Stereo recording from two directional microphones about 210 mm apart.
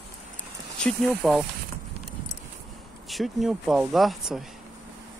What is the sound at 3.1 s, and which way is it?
Speech, centre (ahead or behind).